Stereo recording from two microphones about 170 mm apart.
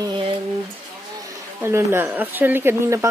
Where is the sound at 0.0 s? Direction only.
25° right (ahead or behind).